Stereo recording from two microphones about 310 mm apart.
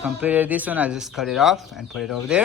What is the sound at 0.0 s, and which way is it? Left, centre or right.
Speech, centre.